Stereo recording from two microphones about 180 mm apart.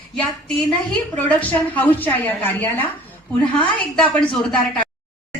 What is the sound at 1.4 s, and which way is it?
A woman's voice, 10° left (ahead or behind).